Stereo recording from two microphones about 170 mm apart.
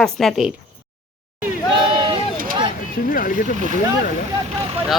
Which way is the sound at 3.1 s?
55° left (ahead or behind).